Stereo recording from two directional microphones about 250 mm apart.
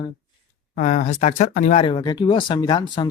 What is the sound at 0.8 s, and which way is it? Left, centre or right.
Speech, left.